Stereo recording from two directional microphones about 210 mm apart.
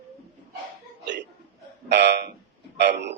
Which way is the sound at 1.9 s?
55° right (ahead or behind).